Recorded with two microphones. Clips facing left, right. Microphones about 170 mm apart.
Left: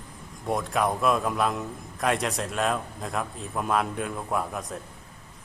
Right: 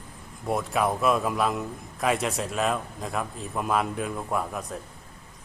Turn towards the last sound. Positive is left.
turn(degrees=0)  # may be behind; listen again after turning